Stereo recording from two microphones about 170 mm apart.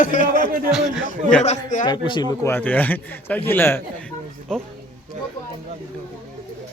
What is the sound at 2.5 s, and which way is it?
A man's voice, 10° left (ahead or behind).